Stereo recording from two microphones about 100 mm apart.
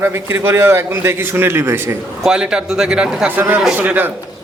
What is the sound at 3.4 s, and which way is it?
Speech, 20° right (ahead or behind).